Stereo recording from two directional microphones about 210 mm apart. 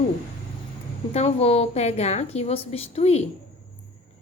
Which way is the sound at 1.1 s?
30° left (ahead or behind).